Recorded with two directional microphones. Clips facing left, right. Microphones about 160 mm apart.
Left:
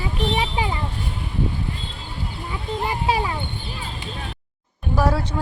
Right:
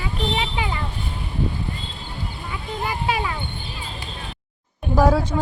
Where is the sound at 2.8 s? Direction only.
30° left (ahead or behind).